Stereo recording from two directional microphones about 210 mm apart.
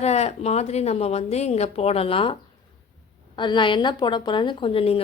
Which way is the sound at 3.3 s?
20° left (ahead or behind).